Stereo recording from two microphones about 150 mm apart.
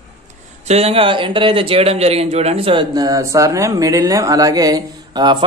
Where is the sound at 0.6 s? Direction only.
45° right (ahead or behind).